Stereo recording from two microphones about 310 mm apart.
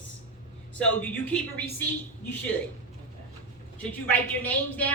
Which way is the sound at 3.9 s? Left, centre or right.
Centre.